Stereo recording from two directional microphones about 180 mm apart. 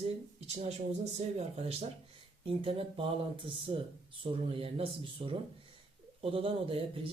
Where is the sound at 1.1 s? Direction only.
35° right (ahead or behind).